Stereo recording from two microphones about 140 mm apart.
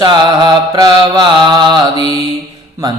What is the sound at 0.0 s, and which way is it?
Mantra, 35° right (ahead or behind).